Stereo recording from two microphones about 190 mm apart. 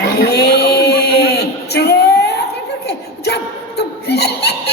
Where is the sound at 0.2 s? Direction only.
60° left (ahead or behind).